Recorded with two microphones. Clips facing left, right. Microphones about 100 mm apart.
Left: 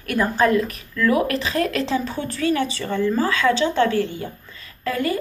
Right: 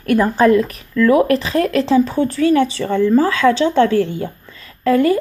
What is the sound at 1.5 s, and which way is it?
Speech, 40° right (ahead or behind).